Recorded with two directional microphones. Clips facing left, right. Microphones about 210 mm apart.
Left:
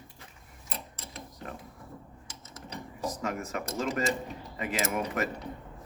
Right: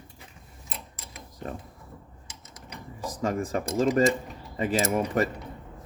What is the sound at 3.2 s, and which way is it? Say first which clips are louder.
Speech: right 11 dB; 30° right (ahead or behind).